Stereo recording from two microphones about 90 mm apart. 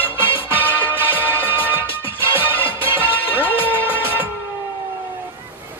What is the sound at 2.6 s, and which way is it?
Music, 25° right (ahead or behind).